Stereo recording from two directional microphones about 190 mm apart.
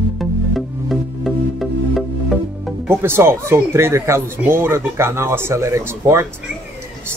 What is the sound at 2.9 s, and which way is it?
Speech, 10° right (ahead or behind).